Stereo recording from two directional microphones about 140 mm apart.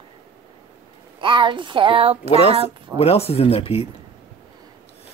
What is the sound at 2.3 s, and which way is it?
Speech, 45° left (ahead or behind).